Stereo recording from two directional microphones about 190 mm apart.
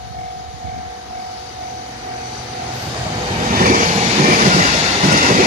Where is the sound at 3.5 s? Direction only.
45° right (ahead or behind).